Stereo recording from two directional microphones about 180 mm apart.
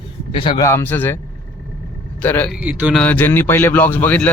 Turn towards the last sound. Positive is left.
turn(degrees=10)  # may be behind; listen again after turning